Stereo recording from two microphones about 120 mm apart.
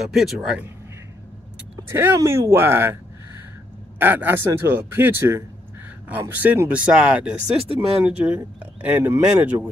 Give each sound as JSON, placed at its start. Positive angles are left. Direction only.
{"t": 0.0, "sound": "speech", "side_deg": 0}
{"t": 1.8, "sound": "speech", "side_deg": -20}
{"t": 4.0, "sound": "speech", "side_deg": -15}